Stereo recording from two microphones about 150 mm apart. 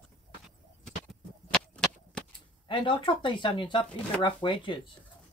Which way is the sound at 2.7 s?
35° left (ahead or behind).